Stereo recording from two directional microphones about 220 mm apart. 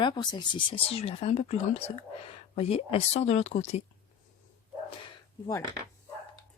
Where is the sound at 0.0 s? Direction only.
20° left (ahead or behind).